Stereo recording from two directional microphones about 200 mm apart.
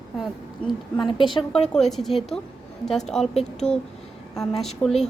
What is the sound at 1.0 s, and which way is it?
Speech, 25° left (ahead or behind).